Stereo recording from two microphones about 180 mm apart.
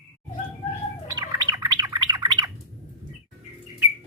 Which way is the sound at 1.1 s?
20° right (ahead or behind).